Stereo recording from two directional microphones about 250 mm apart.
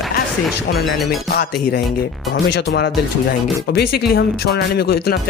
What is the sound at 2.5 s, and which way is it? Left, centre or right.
Speech, left.